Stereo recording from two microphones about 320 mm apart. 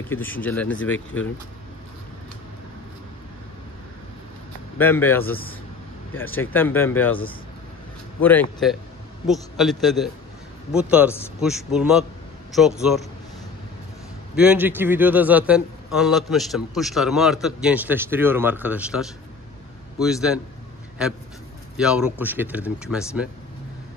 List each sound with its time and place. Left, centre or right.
0.1 s a man's voice: centre
4.7 s speech: centre
5.2 s speech: left
6.3 s speech: centre
8.2 s a man's voice: centre
14.3 s a man's voice: centre
21.7 s a man's voice: centre